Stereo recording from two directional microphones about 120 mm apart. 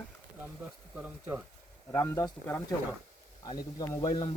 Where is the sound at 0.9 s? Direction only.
15° right (ahead or behind).